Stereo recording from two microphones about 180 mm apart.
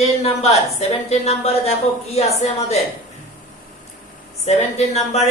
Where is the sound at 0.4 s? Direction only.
35° left (ahead or behind).